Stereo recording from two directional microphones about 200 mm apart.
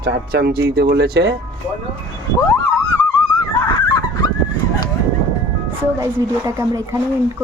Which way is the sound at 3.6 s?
20° left (ahead or behind).